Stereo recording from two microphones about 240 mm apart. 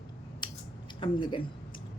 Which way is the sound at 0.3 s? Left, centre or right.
Centre.